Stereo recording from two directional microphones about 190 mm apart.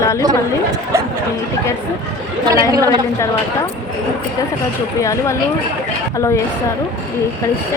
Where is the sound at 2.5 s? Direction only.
15° right (ahead or behind).